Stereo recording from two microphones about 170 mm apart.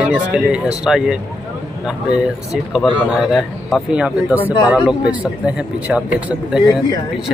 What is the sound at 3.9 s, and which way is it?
Speech, 5° right (ahead or behind).